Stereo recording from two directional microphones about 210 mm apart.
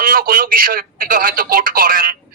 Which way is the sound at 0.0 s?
45° right (ahead or behind).